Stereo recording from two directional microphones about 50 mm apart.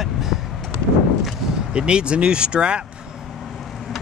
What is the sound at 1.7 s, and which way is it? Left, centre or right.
Speech, centre.